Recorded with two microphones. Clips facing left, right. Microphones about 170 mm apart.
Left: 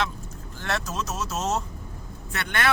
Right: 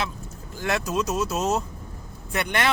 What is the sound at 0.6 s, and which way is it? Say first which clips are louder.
Speech: right 5 dB; 10° right (ahead or behind).